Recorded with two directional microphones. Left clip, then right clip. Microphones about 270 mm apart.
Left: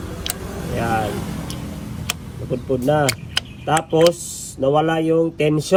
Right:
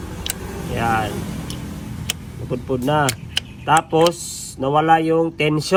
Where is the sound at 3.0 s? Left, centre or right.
Centre.